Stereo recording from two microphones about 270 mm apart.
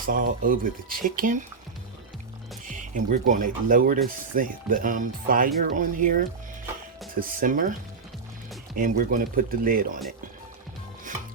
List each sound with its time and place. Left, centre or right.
0.0 s speech: right
2.6 s speech: right
7.2 s speech: right
8.7 s speech: right